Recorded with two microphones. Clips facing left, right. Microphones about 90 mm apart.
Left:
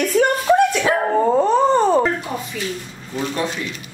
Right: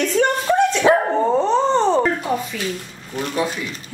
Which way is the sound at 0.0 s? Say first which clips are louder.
Left 1 dB; 10° left (ahead or behind).